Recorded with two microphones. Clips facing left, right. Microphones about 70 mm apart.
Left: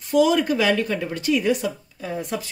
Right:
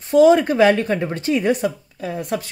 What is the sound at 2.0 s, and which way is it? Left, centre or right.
Speech, right.